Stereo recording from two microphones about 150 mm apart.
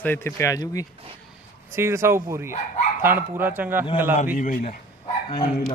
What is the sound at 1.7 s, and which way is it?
Speech, 15° right (ahead or behind).